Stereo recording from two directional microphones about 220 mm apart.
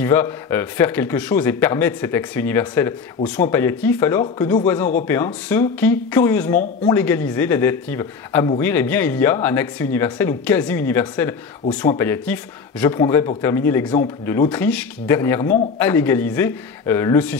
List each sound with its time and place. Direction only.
0.0 s speech: 10° left (ahead or behind)